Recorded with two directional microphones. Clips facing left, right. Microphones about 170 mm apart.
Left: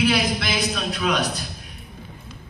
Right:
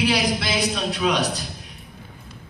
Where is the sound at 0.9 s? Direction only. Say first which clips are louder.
Right 1 dB; 15° right (ahead or behind).